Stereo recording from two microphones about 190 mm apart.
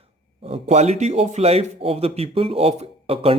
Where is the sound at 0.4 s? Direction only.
35° right (ahead or behind).